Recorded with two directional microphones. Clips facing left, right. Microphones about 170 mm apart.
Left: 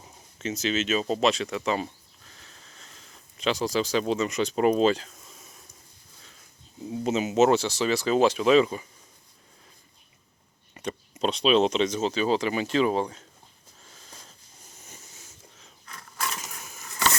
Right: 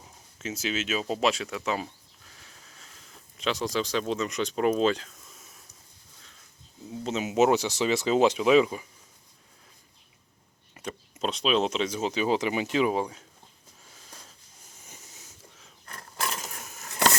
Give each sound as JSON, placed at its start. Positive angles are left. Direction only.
{"t": 0.0, "sound": "a sound", "side_deg": -5}
{"t": 6.9, "sound": "speech", "side_deg": 10}
{"t": 7.2, "sound": "speech", "side_deg": -10}
{"t": 10.8, "sound": "speech", "side_deg": 0}